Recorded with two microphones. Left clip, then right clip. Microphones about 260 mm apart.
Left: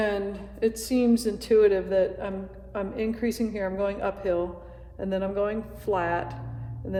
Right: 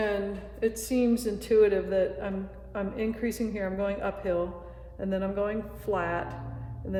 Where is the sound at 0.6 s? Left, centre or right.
Left.